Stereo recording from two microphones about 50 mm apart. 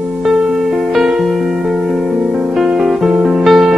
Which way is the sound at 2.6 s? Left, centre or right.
Centre.